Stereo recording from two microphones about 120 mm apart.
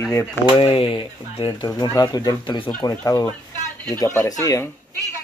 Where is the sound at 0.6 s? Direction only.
50° left (ahead or behind).